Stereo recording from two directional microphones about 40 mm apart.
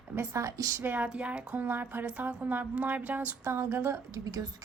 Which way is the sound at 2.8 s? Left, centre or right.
Right.